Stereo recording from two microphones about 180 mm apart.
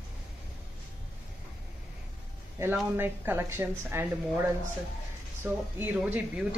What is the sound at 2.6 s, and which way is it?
A woman's voice, 10° right (ahead or behind).